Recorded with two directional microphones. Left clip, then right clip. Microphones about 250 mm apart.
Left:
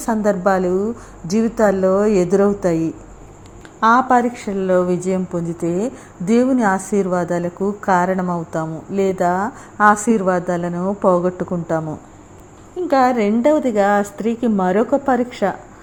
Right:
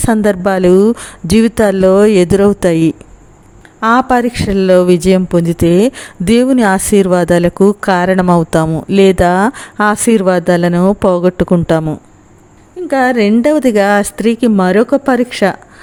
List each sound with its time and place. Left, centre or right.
0.0 s a woman's voice: right
0.7 s speech: right
0.9 s a woman's voice: right
3.8 s speech: right
12.9 s speech: right